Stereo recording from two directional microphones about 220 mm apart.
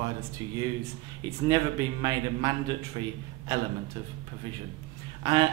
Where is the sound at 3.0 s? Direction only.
20° right (ahead or behind).